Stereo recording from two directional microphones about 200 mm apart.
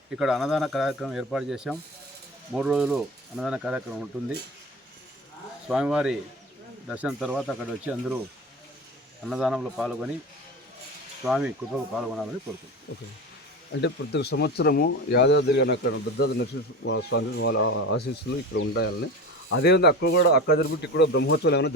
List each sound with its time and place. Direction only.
0.1 s speech: 5° right (ahead or behind)
5.6 s speech: 5° right (ahead or behind)
9.2 s speech: 5° right (ahead or behind)
11.3 s speech: 5° right (ahead or behind)
13.8 s speech: 55° left (ahead or behind); by 18.0 s 80° left
18.5 s speech: 55° left (ahead or behind)